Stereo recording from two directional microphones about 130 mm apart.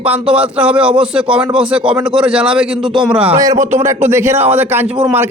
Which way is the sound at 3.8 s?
20° right (ahead or behind).